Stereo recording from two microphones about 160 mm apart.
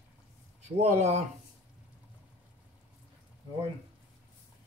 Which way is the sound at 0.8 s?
45° right (ahead or behind).